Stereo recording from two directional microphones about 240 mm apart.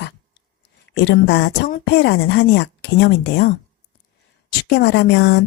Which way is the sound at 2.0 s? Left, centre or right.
Left.